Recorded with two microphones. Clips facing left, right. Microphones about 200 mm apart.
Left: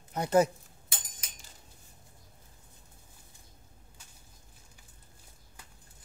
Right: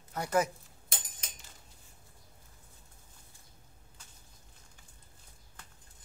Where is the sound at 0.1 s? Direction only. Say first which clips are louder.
Left 5 dB; 25° left (ahead or behind).